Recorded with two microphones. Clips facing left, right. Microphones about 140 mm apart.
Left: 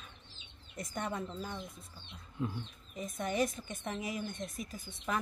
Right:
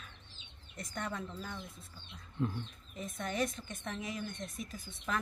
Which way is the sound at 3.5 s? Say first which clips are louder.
Left 2 dB; 15° left (ahead or behind).